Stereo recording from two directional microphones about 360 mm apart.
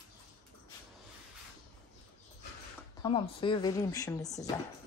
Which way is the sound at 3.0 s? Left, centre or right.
Centre.